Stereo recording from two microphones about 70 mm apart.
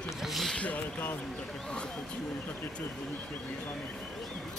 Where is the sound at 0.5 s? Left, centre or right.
Left.